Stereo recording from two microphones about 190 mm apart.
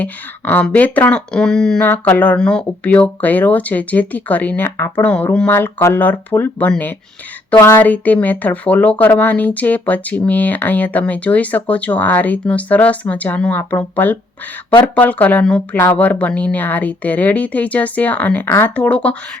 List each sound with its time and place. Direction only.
0.0 s speech: 10° left (ahead or behind)